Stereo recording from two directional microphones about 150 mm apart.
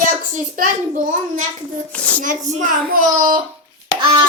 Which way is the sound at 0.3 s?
60° right (ahead or behind).